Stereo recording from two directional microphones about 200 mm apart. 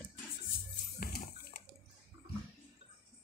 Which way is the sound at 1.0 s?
45° left (ahead or behind).